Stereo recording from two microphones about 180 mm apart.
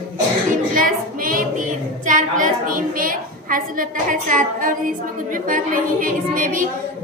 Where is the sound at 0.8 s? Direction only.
50° right (ahead or behind).